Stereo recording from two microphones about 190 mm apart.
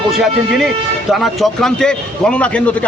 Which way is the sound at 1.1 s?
Centre (ahead or behind).